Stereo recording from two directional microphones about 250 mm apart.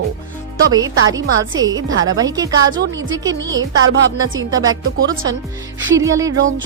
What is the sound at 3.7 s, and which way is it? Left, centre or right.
Speech, right.